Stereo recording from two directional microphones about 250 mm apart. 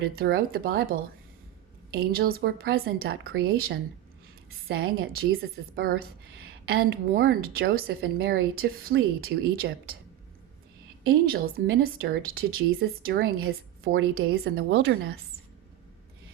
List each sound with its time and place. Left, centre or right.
0.2 s a woman's voice: right
2.0 s a woman's voice: right
11.0 s a woman's voice: right
14.5 s speech: right